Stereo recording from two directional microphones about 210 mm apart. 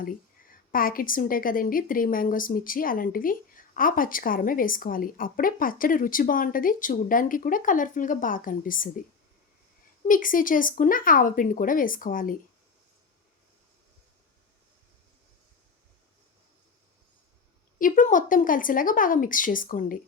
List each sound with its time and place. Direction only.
0.7 s a woman's voice: 45° left (ahead or behind)
10.1 s a woman's voice: 40° left (ahead or behind)
17.7 s a woman's voice: 40° left (ahead or behind)